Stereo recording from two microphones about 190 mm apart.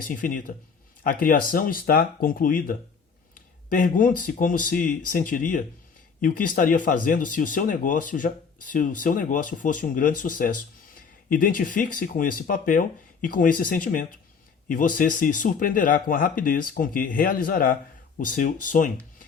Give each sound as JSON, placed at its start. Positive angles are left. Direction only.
{"t": 0.0, "sound": "speech", "side_deg": 45}